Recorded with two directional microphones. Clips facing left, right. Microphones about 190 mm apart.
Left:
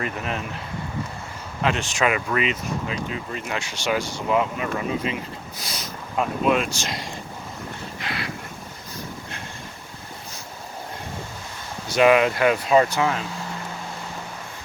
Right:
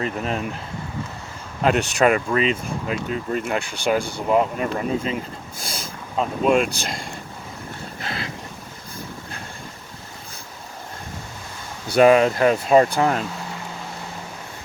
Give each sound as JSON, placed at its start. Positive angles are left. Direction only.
{"t": 0.0, "sound": "speech", "side_deg": -35}
{"t": 1.6, "sound": "speech", "side_deg": -55}
{"t": 2.0, "sound": "speech", "side_deg": -40}
{"t": 2.8, "sound": "speech", "side_deg": -45}
{"t": 8.0, "sound": "wind", "side_deg": -30}
{"t": 11.9, "sound": "speech", "side_deg": -35}